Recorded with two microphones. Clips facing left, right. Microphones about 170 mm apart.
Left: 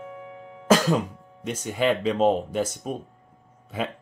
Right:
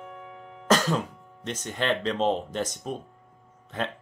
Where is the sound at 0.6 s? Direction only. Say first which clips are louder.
Left 3 dB; 10° left (ahead or behind).